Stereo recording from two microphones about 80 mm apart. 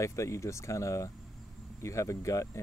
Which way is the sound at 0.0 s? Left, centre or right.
Left.